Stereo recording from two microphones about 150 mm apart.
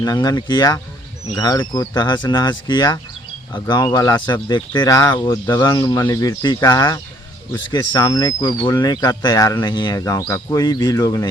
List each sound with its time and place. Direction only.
0.0 s speech: 25° left (ahead or behind)